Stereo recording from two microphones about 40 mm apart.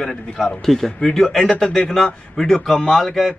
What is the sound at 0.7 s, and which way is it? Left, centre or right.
A man's voice, centre.